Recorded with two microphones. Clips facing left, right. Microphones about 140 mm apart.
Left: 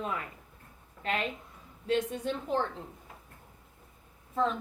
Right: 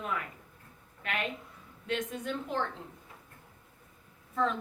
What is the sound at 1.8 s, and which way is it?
Speech, 30° left (ahead or behind).